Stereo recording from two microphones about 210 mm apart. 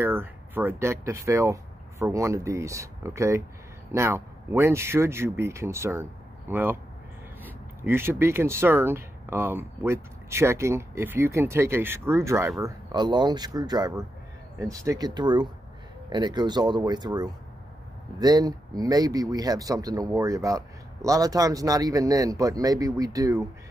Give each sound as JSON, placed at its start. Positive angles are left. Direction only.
{"t": 0.0, "sound": "speech", "side_deg": -10}